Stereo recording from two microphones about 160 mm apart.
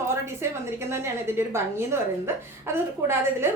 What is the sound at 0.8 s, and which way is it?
A woman's voice, 15° right (ahead or behind).